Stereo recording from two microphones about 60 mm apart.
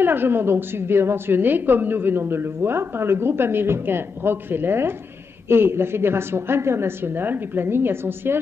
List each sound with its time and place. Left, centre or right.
0.0 s a woman's voice: right